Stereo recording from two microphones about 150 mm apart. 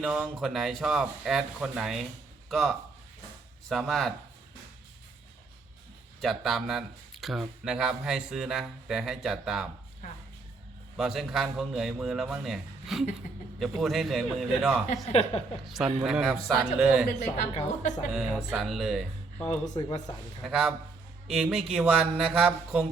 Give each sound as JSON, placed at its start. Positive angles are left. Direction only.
{"t": 0.0, "sound": "speech", "side_deg": -5}
{"t": 6.2, "sound": "speech", "side_deg": 0}
{"t": 10.9, "sound": "speech", "side_deg": 0}
{"t": 15.1, "sound": "a woman's voice", "side_deg": 40}
{"t": 15.6, "sound": "speech", "side_deg": 0}
{"t": 17.5, "sound": "a woman's voice", "side_deg": 45}
{"t": 18.1, "sound": "speech", "side_deg": 0}
{"t": 19.6, "sound": "speech", "side_deg": 25}
{"t": 20.4, "sound": "speech", "side_deg": 0}